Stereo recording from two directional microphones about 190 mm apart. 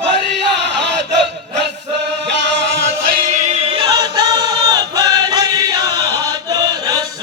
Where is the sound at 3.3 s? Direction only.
40° right (ahead or behind); by 7.0 s 20° right (ahead or behind).